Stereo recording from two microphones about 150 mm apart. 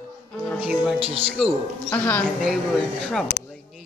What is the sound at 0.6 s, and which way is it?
Speech, 5° right (ahead or behind).